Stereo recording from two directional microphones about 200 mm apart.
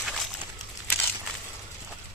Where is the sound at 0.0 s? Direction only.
Centre (ahead or behind).